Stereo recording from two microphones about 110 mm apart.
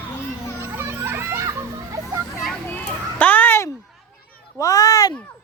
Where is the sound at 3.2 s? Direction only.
15° left (ahead or behind).